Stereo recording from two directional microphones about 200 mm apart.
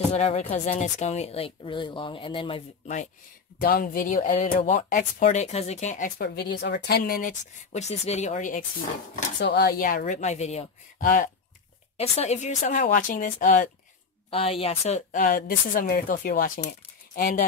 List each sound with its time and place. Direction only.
0.1 s speech: 30° left (ahead or behind)
3.6 s speech: 45° left (ahead or behind)
9.1 s a woman's voice: 55° left (ahead or behind)
12.0 s speech: 30° left (ahead or behind)
14.3 s a woman's voice: 30° left (ahead or behind)